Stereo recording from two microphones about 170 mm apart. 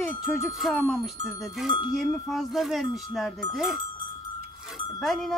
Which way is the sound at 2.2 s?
Centre (ahead or behind).